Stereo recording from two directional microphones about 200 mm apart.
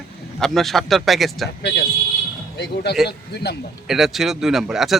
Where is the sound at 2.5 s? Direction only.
55° left (ahead or behind).